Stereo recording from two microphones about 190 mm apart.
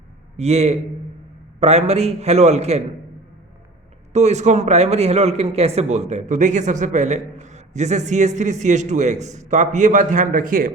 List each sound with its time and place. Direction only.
0.3 s a man's voice: 35° right (ahead or behind)
4.1 s a man's voice: 35° right (ahead or behind)